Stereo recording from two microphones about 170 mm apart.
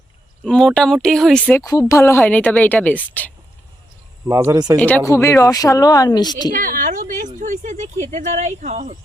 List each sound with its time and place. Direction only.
0.4 s a woman's voice: 5° left (ahead or behind)
4.3 s speech: 20° right (ahead or behind)
4.8 s a woman's voice: 10° left (ahead or behind)
6.5 s a woman's voice: 55° right (ahead or behind)